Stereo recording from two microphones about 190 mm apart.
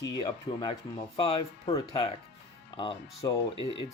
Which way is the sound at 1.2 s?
25° left (ahead or behind).